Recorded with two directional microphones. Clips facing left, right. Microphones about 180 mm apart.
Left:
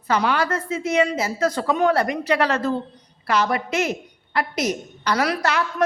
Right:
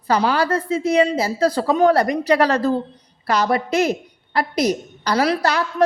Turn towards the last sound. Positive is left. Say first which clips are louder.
# right 3 dB
turn(degrees=-35)  # may be behind; listen again after turning